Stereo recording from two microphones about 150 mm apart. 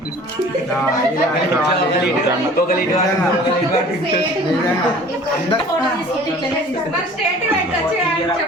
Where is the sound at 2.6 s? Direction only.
75° left (ahead or behind).